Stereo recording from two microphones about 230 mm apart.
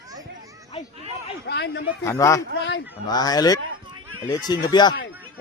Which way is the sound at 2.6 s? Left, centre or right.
Left.